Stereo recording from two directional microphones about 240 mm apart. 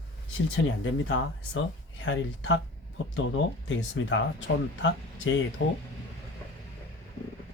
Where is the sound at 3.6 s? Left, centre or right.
Left.